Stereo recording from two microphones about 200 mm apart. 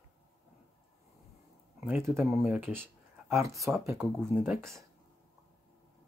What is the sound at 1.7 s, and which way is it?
Speech, 10° right (ahead or behind).